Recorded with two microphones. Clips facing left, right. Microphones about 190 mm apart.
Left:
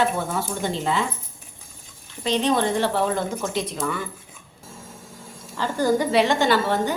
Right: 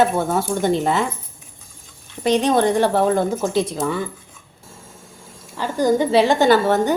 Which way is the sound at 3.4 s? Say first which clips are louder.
Right 6 dB; 35° right (ahead or behind).